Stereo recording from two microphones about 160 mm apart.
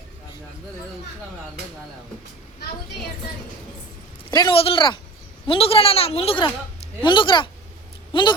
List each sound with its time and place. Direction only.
4.3 s speech: 30° left (ahead or behind)